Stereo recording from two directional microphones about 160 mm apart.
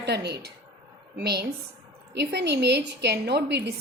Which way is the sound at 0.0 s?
90° right.